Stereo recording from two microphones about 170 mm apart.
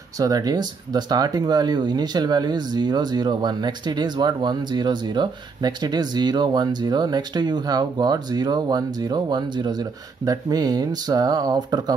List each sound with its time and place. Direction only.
0.2 s speech: 20° right (ahead or behind)